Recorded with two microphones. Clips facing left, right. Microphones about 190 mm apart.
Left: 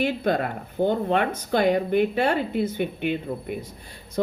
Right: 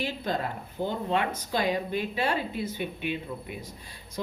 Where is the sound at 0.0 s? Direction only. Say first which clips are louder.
Left 7 dB; 65° left (ahead or behind).